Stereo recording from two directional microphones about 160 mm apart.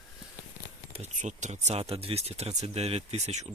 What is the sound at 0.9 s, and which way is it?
Speech, 45° right (ahead or behind).